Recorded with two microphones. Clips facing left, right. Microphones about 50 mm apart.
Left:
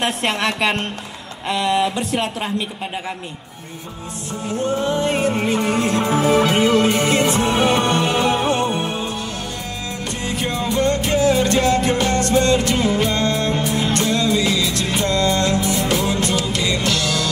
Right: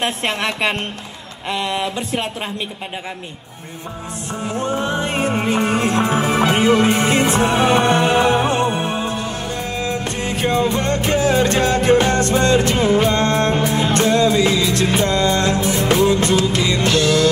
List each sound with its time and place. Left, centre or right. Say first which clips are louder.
0.0 s speech: left 1 dB; right
4.6 s music: left 1 dB; right